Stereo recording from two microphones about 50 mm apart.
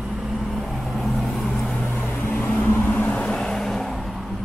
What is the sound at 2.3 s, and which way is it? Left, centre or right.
Vehicle, left.